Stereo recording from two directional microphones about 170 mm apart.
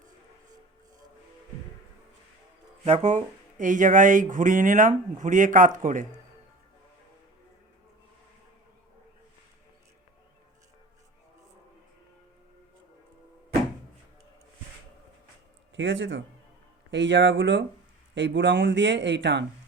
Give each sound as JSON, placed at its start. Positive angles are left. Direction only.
{"t": 2.8, "sound": "speech", "side_deg": -40}
{"t": 15.7, "sound": "speech", "side_deg": -90}